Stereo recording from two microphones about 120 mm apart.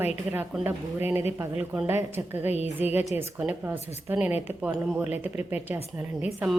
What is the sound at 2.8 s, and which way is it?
Speech, 60° left (ahead or behind).